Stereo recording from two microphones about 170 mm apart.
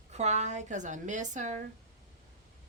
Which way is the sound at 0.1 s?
40° right (ahead or behind).